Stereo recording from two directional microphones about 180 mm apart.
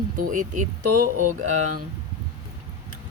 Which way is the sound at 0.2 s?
45° right (ahead or behind).